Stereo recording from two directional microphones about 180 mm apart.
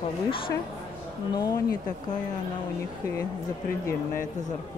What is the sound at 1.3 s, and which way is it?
Speech, 20° left (ahead or behind).